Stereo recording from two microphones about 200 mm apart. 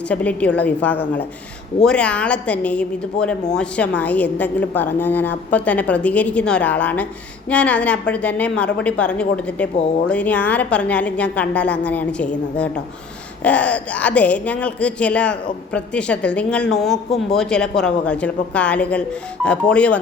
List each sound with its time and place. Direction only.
0.1 s a woman's voice: 5° left (ahead or behind)